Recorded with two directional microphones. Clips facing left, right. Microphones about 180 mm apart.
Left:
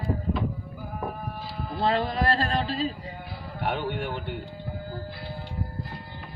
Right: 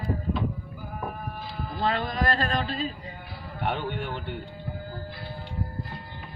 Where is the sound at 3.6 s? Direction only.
5° left (ahead or behind).